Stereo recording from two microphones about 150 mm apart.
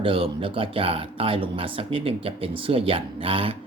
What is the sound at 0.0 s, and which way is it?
Speech, 35° right (ahead or behind).